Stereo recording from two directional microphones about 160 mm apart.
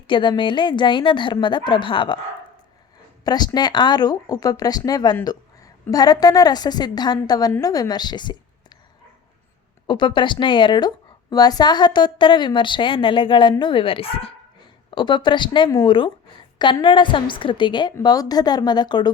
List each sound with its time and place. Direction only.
0.1 s a woman's voice: 30° left (ahead or behind)
3.2 s a woman's voice: 25° left (ahead or behind)
9.8 s a woman's voice: 30° left (ahead or behind)